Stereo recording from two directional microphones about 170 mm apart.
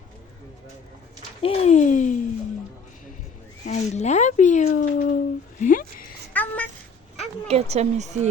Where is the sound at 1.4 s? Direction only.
35° left (ahead or behind).